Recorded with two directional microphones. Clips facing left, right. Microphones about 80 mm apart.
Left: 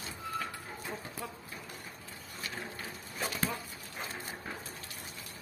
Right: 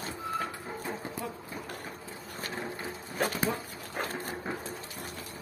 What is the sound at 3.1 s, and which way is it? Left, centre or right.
Dog, right.